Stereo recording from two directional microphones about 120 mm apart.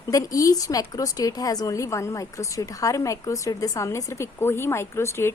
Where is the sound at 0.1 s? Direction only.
30° left (ahead or behind).